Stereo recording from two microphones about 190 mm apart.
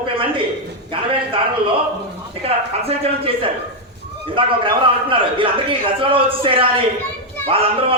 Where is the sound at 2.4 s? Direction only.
30° right (ahead or behind).